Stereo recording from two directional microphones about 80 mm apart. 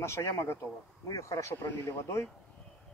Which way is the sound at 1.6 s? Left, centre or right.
Left.